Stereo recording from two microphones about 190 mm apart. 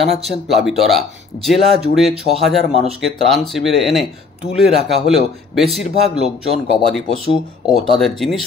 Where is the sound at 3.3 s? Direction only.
Centre (ahead or behind).